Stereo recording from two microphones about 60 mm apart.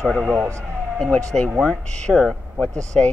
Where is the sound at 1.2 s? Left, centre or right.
Centre.